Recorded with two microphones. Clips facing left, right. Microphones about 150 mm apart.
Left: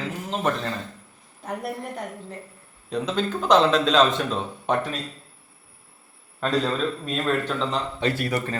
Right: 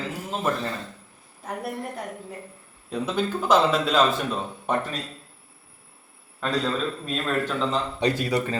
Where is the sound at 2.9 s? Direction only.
10° right (ahead or behind).